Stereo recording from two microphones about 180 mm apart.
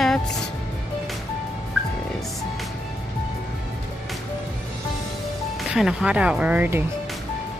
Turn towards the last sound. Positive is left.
turn(degrees=-10)  # may be behind; listen again after turning